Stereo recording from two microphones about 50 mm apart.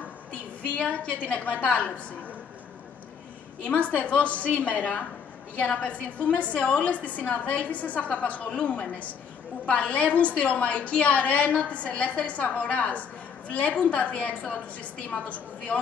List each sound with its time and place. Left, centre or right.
0.3 s a woman's voice: left
3.6 s a woman's voice: left